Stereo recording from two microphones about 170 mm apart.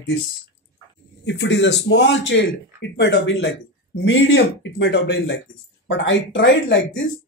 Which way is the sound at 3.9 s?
90° left.